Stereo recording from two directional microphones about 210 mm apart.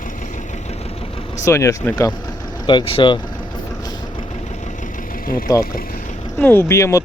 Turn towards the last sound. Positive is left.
turn(degrees=15)  # may be behind; listen again after turning